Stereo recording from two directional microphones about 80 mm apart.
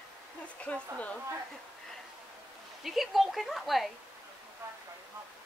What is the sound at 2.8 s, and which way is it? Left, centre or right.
A woman's voice, centre.